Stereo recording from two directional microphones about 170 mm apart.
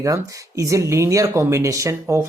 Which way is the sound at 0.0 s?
20° right (ahead or behind).